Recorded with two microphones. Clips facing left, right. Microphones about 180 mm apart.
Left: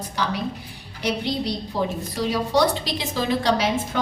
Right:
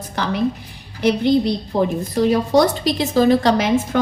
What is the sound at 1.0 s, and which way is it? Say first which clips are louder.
A woman's voice: right 9 dB; 50° right (ahead or behind).